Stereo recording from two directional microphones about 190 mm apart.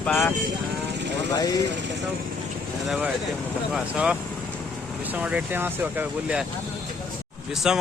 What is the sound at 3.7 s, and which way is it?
Speech, 5° right (ahead or behind).